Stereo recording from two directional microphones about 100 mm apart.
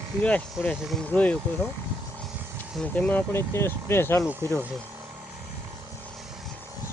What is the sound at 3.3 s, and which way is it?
Speech, 25° left (ahead or behind).